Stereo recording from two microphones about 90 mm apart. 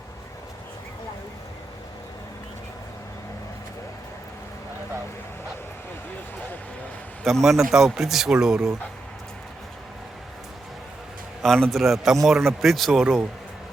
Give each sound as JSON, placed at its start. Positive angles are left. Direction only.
{"t": 7.3, "sound": "speech", "side_deg": 0}
{"t": 11.4, "sound": "speech", "side_deg": 5}